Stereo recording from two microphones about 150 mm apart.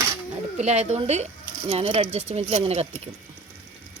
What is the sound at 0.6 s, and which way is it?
Speech, 45° right (ahead or behind).